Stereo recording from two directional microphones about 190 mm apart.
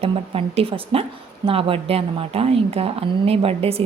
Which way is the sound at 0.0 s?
30° right (ahead or behind).